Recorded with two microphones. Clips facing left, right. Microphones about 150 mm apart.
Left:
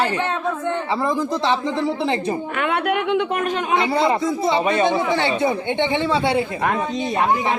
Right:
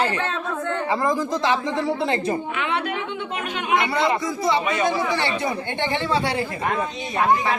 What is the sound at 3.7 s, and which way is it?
Speech, 30° left (ahead or behind).